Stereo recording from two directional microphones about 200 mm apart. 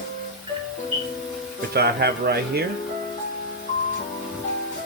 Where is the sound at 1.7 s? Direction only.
55° right (ahead or behind).